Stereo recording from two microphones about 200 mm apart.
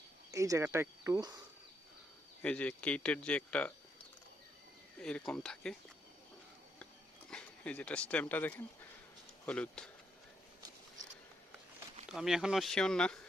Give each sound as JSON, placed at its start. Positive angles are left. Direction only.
{"t": 0.3, "sound": "speech", "side_deg": -15}
{"t": 2.4, "sound": "speech", "side_deg": 5}
{"t": 4.9, "sound": "speech", "side_deg": 5}
{"t": 7.3, "sound": "speech", "side_deg": 5}
{"t": 12.0, "sound": "speech", "side_deg": 0}